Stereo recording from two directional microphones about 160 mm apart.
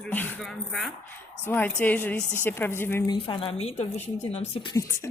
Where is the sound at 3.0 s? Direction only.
35° left (ahead or behind).